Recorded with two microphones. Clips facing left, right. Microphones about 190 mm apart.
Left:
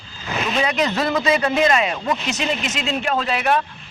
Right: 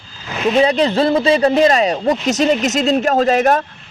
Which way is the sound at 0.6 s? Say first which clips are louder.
Right 7 dB; 30° right (ahead or behind).